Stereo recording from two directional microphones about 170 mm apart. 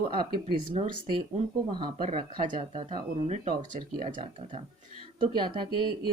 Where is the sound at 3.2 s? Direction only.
45° right (ahead or behind).